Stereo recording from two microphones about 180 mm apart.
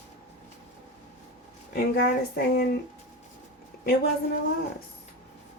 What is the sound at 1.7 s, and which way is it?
Speech, 60° left (ahead or behind).